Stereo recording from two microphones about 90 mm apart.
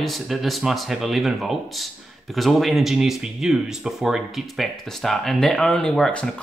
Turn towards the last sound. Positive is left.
turn(degrees=5)  # may be behind; listen again after turning